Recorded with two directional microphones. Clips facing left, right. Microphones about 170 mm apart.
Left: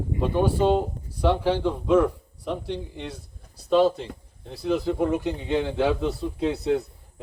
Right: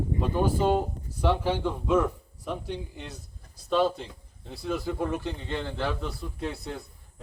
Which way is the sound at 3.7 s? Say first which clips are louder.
Left 5 dB; 10° left (ahead or behind).